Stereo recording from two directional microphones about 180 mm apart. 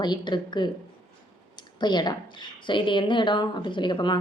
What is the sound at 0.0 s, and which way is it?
Speech, 25° left (ahead or behind).